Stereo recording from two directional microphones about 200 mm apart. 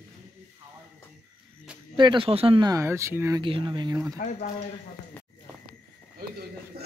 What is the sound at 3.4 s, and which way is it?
Speech, 25° right (ahead or behind).